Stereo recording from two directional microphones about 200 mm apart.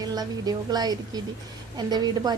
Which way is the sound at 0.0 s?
20° right (ahead or behind).